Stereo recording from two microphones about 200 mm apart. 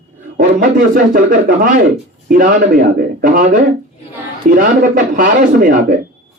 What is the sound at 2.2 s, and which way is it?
A man's voice, 45° right (ahead or behind).